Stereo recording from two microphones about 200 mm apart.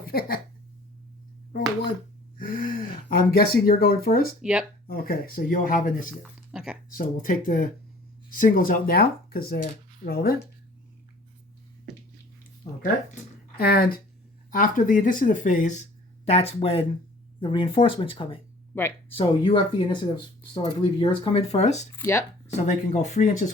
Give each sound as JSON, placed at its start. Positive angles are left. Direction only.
{"t": 0.0, "sound": "speech", "side_deg": 50}
{"t": 2.4, "sound": "gasp", "side_deg": 45}
{"t": 3.1, "sound": "speech", "side_deg": 50}
{"t": 4.4, "sound": "speech", "side_deg": -5}
{"t": 4.9, "sound": "speech", "side_deg": 50}
{"t": 6.5, "sound": "a sound", "side_deg": -5}
{"t": 6.9, "sound": "speech", "side_deg": 45}
{"t": 13.6, "sound": "speech", "side_deg": 50}
{"t": 18.7, "sound": "speech", "side_deg": 10}
{"t": 19.1, "sound": "speech", "side_deg": 25}
{"t": 21.9, "sound": "speech", "side_deg": 15}
{"t": 22.6, "sound": "speech", "side_deg": 35}